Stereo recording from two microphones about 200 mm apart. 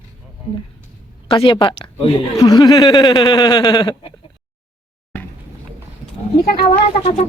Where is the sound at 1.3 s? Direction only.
25° left (ahead or behind).